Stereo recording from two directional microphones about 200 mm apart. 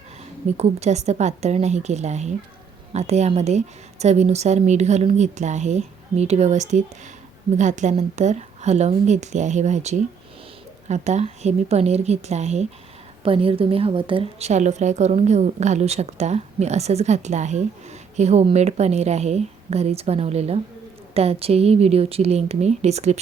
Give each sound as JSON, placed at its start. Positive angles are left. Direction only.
{"t": 0.5, "sound": "a woman's voice", "side_deg": -30}